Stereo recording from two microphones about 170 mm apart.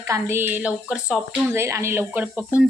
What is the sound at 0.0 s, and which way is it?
A woman's voice, 15° right (ahead or behind).